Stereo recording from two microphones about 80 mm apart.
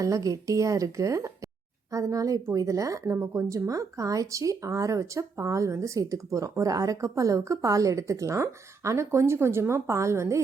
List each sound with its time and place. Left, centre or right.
0.0 s a woman's voice: right